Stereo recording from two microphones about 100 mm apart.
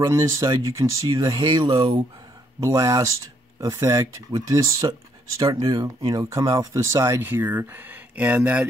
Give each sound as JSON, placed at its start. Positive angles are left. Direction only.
{"t": 0.0, "sound": "speech", "side_deg": -30}
{"t": 2.6, "sound": "speech", "side_deg": -30}